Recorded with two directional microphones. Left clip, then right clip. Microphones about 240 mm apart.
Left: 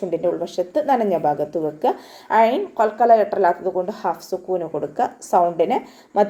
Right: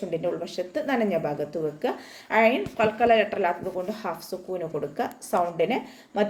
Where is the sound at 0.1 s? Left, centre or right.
Centre.